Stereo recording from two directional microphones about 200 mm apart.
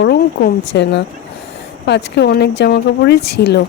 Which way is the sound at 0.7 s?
60° left (ahead or behind).